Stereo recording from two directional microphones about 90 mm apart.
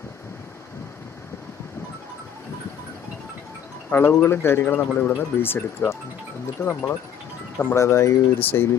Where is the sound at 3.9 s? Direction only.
25° left (ahead or behind).